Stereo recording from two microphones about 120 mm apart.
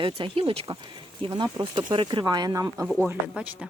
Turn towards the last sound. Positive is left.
turn(degrees=-10)  # may be behind; listen again after turning